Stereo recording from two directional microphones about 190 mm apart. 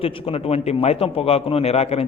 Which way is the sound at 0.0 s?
30° left (ahead or behind).